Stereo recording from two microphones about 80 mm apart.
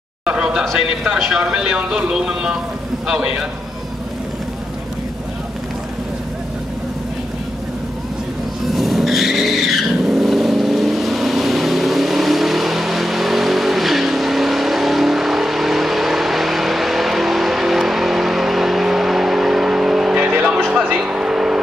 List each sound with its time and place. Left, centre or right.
0.2 s a sound: centre
0.7 s speech: centre
8.6 s vehicle: centre
20.2 s vehicle: right
20.5 s vehicle: centre